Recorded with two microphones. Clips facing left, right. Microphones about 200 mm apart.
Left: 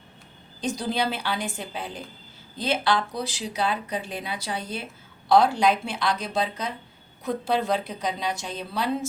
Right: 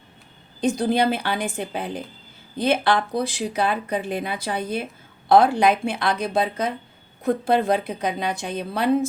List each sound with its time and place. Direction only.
0.6 s speech: 55° right (ahead or behind)